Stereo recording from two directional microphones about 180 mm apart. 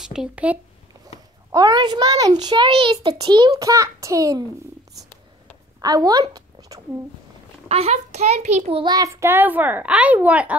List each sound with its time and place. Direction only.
0.0 s speech: 5° right (ahead or behind)
1.5 s a child's voice: 20° right (ahead or behind)
5.8 s speech: 20° right (ahead or behind)
7.6 s a child's voice: 35° right (ahead or behind)
8.9 s a child's voice: 15° right (ahead or behind)